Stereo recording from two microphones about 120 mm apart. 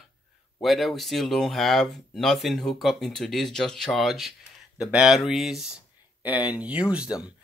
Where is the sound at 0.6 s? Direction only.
Centre (ahead or behind).